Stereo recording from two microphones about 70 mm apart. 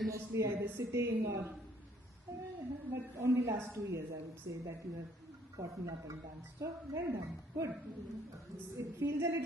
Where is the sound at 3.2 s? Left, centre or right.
Right.